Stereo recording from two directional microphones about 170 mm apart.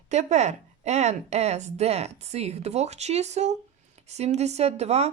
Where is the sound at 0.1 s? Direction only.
45° right (ahead or behind).